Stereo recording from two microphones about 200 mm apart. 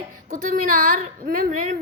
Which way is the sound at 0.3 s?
45° right (ahead or behind).